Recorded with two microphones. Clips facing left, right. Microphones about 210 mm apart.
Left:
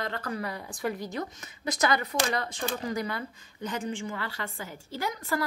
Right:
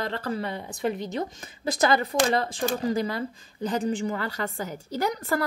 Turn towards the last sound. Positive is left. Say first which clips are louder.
# right 5 dB
turn(degrees=-40)  # may be behind; listen again after turning